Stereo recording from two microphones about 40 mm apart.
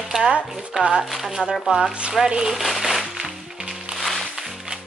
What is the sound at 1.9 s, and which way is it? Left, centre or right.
Speech, right.